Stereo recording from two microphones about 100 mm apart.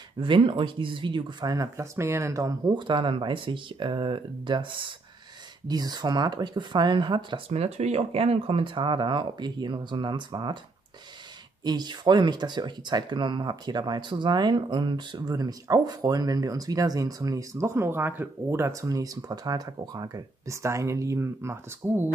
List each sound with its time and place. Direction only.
0.2 s speech: 55° right (ahead or behind)
1.4 s speech: 35° right (ahead or behind); by 4.9 s 55° right (ahead or behind)
5.7 s speech: 45° right (ahead or behind)
7.4 s speech: 90° right; by 10.6 s 50° right (ahead or behind)
11.6 s speech: 45° right (ahead or behind); by 22.1 s 25° right (ahead or behind)